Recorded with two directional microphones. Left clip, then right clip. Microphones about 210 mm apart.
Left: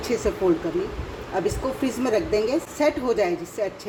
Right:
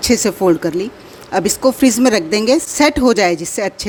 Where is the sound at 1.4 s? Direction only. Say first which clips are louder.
Right 11 dB; 50° right (ahead or behind).